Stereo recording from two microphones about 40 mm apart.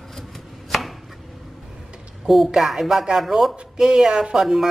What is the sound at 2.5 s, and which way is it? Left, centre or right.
Speech, centre.